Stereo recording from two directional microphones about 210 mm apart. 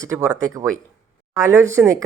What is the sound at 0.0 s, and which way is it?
Speech, 15° right (ahead or behind).